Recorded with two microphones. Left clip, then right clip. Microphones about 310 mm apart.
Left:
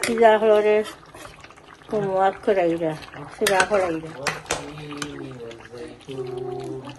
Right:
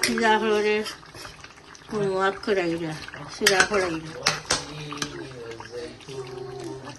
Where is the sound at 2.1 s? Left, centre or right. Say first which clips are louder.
Left 5 dB; centre.